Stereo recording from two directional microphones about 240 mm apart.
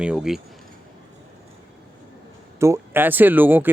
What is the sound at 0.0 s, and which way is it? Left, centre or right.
Speech, centre.